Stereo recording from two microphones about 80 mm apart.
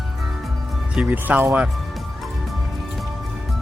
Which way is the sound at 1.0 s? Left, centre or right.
Right.